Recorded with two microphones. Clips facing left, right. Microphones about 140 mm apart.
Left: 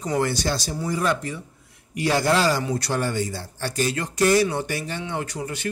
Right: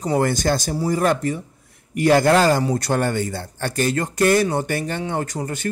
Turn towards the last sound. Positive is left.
turn(degrees=-45)  # may be behind; listen again after turning